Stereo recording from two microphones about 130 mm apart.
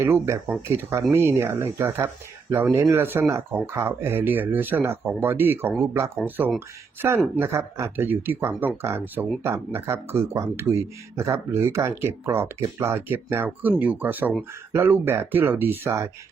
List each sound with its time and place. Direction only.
0.0 s speech: 20° right (ahead or behind)